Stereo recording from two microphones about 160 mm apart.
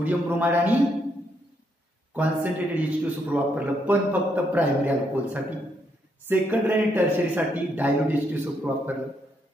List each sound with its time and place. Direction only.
0.0 s a man's voice: 10° right (ahead or behind)
2.1 s a man's voice: 10° right (ahead or behind)